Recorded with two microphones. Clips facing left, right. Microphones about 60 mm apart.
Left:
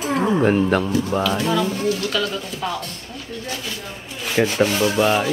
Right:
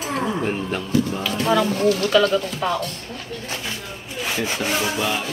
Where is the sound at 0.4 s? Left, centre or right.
Left.